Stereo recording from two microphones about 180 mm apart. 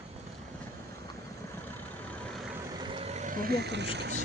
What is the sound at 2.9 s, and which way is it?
Vehicle, 35° right (ahead or behind).